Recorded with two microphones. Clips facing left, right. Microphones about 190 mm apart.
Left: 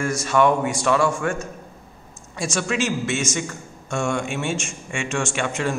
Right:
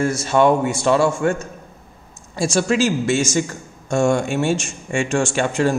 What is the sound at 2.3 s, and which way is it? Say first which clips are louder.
Speech: right 6 dB; 30° right (ahead or behind).